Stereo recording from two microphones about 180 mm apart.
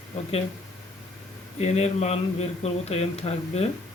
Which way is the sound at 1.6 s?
35° left (ahead or behind).